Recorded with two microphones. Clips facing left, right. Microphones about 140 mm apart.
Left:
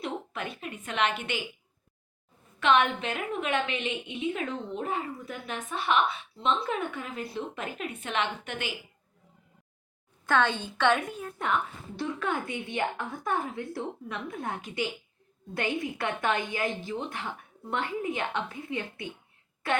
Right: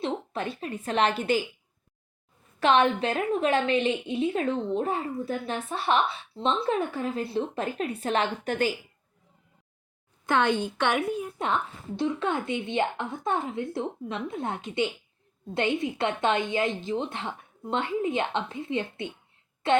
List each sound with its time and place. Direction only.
0.0 s a woman's voice: 35° right (ahead or behind)
2.6 s a woman's voice: 35° right (ahead or behind)
10.2 s a woman's voice: 15° right (ahead or behind)
11.9 s speech: 20° right (ahead or behind)